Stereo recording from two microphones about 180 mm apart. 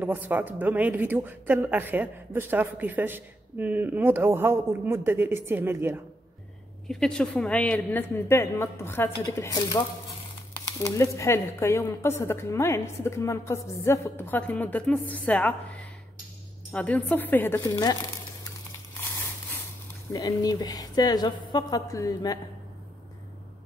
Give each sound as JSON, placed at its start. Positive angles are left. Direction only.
{"t": 0.0, "sound": "speech", "side_deg": -10}
{"t": 6.9, "sound": "speech", "side_deg": 5}
{"t": 10.6, "sound": "speech", "side_deg": 15}
{"t": 20.1, "sound": "speech", "side_deg": 20}